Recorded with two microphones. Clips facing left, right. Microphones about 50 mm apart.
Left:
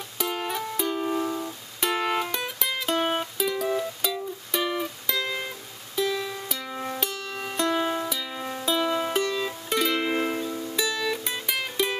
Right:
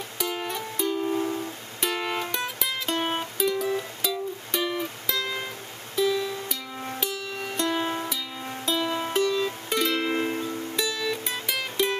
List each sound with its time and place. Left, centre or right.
0.2 s music: centre
1.1 s music: left
1.8 s music: centre